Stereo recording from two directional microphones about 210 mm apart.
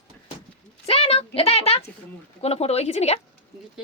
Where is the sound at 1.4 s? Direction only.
30° left (ahead or behind).